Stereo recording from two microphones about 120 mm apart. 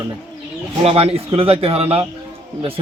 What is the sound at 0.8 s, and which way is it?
Speech, 55° right (ahead or behind).